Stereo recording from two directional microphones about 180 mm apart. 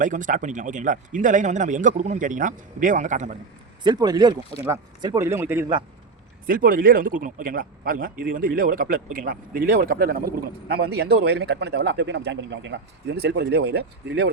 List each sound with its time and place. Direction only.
0.0 s speech: 45° right (ahead or behind)
3.8 s speech: 20° right (ahead or behind)
6.5 s speech: 50° right (ahead or behind); by 14.3 s 70° right (ahead or behind)